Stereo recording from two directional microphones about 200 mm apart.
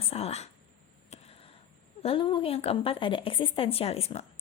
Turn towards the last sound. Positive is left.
turn(degrees=30)  # may be behind; listen again after turning